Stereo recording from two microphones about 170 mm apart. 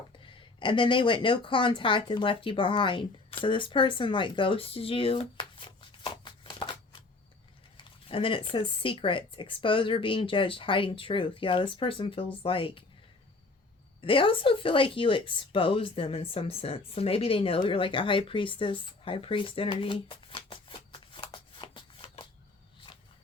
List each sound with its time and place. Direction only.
0.2 s speech: 30° left (ahead or behind)
14.0 s a woman's voice: 30° left (ahead or behind)